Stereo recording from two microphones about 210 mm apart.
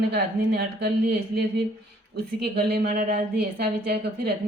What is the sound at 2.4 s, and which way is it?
Music, 50° right (ahead or behind).